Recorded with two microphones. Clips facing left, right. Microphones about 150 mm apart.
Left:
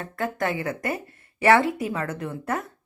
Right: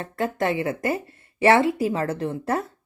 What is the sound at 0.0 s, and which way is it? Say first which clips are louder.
Speech: right 3 dB; 25° right (ahead or behind).